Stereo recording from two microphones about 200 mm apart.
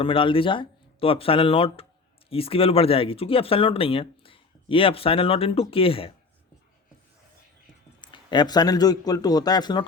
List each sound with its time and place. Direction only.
0.0 s speech: 25° left (ahead or behind)
8.0 s speech: 20° left (ahead or behind)